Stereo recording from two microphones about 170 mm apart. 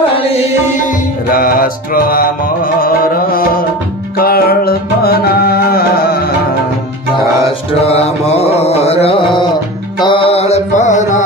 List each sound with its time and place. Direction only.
1.3 s music: 60° left (ahead or behind)
7.8 s mantra: 35° left (ahead or behind)
9.9 s music: 30° left (ahead or behind); by 11.2 s 45° left (ahead or behind)